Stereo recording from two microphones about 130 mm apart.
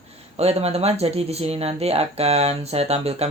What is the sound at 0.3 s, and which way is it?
Speech, 55° right (ahead or behind).